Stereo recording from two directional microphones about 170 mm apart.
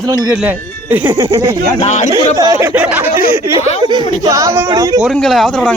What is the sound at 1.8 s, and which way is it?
Speech, 40° left (ahead or behind).